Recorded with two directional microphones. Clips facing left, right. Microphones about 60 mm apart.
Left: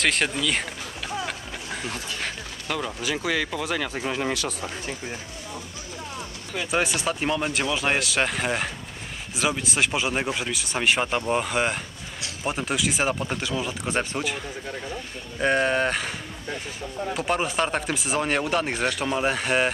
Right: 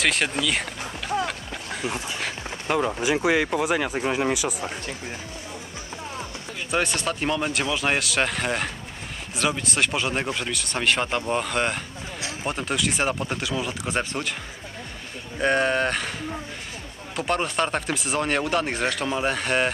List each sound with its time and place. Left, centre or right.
0.0 s run: centre
2.7 s speech: right
6.7 s speech: centre
15.3 s speech: centre
17.1 s speech: centre